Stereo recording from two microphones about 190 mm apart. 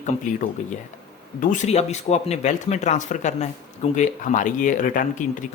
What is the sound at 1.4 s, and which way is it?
Speech, 35° left (ahead or behind).